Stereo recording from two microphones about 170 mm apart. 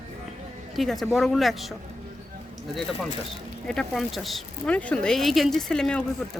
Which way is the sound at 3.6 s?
5° left (ahead or behind).